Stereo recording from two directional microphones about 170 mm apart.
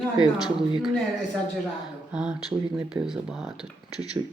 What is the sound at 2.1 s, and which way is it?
Speech, 5° right (ahead or behind).